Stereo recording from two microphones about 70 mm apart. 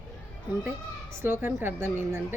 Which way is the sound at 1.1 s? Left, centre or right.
Right.